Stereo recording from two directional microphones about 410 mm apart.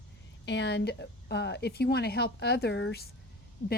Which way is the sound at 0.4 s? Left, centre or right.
Left.